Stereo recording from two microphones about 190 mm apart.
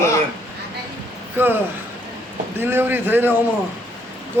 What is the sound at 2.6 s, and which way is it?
Speech, 10° right (ahead or behind).